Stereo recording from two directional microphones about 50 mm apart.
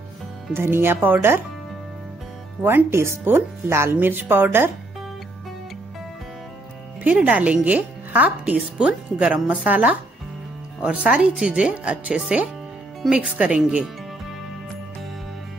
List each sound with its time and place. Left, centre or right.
0.6 s speech: right
2.6 s speech: right
3.9 s speech: right
7.0 s speech: right
8.7 s speech: right